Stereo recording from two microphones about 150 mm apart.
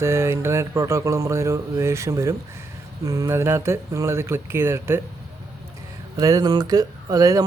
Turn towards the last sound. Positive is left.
turn(degrees=-25)  # may be behind; listen again after turning